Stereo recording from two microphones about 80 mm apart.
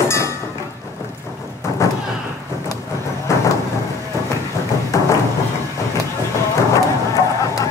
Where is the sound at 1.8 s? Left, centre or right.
Left.